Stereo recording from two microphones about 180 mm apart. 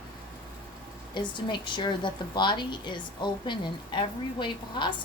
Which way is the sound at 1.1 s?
25° left (ahead or behind).